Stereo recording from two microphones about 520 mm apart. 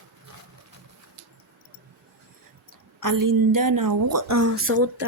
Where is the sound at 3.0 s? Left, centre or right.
Right.